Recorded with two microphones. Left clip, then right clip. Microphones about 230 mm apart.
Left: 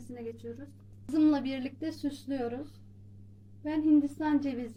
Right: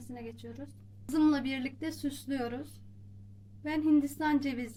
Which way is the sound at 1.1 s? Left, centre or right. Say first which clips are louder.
Left 1 dB; centre.